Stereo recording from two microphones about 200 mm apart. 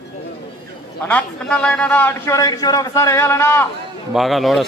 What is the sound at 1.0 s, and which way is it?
A man's voice, 5° left (ahead or behind).